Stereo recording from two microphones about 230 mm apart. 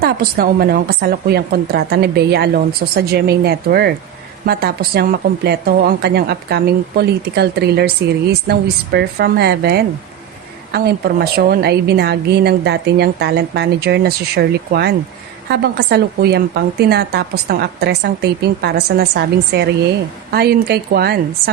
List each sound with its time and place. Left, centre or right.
0.0 s a woman's voice: right